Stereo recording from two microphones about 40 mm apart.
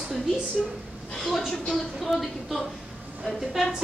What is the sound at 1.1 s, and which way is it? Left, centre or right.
A woman's voice, centre.